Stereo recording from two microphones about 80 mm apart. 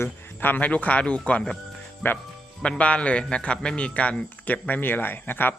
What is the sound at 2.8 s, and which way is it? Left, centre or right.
A man's voice, centre.